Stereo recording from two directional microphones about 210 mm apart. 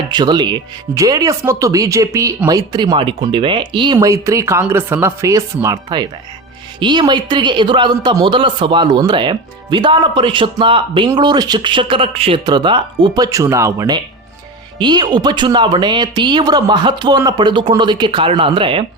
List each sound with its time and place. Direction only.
0.1 s speech: 20° right (ahead or behind)